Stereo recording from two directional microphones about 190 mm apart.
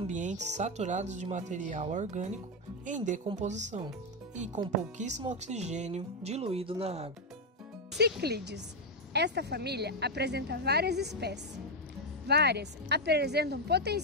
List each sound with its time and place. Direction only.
0.1 s speech: 40° right (ahead or behind)
8.0 s a woman's voice: 60° right (ahead or behind)